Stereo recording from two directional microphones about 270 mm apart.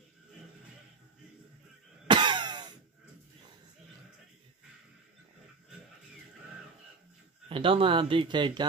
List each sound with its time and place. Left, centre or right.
2.0 s cough: centre
7.4 s speech: centre